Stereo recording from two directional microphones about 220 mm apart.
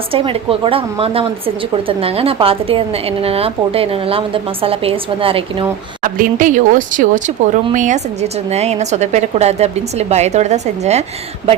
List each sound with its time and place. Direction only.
0.1 s a woman's voice: 25° right (ahead or behind)
6.0 s speech: 35° right (ahead or behind)